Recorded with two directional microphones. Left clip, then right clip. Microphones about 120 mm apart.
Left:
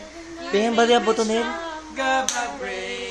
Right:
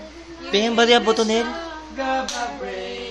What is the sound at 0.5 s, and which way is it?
Music, 25° left (ahead or behind).